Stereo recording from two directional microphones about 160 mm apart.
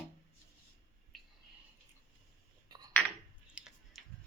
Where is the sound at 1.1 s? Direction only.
Centre (ahead or behind).